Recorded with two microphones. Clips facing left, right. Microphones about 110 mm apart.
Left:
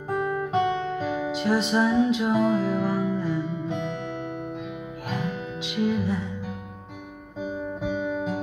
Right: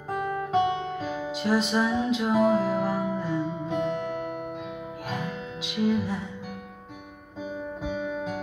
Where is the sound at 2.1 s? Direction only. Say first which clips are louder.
Even; 35° right (ahead or behind).